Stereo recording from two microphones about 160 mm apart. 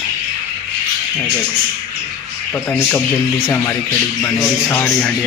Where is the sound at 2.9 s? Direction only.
5° left (ahead or behind).